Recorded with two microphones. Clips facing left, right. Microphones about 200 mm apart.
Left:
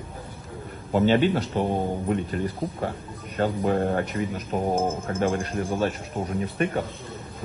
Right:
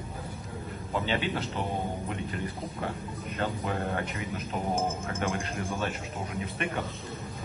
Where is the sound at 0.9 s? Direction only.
50° left (ahead or behind).